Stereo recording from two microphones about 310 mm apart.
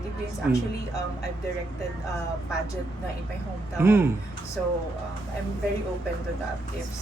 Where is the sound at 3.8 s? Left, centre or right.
Centre.